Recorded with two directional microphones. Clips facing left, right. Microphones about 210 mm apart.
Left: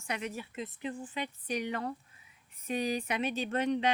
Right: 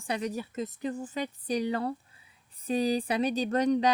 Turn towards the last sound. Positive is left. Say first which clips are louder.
# right 5 dB
turn(degrees=-40)  # may be behind; listen again after turning